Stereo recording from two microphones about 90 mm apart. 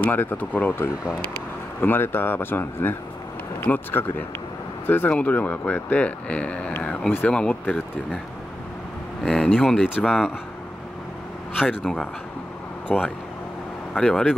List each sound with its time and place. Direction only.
0.0 s speech: 20° left (ahead or behind)
9.2 s speech: 5° left (ahead or behind)
9.8 s speech: 5° right (ahead or behind)
11.8 s speech: 5° left (ahead or behind)
12.9 s speech: 10° right (ahead or behind)
13.9 s speech: 5° left (ahead or behind)